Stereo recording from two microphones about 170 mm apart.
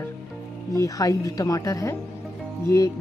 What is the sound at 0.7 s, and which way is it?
Speech, 20° left (ahead or behind).